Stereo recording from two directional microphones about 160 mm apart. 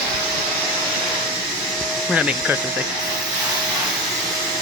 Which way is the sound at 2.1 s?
5° right (ahead or behind).